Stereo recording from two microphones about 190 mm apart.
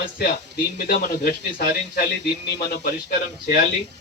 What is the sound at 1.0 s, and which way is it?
Speech, 50° left (ahead or behind).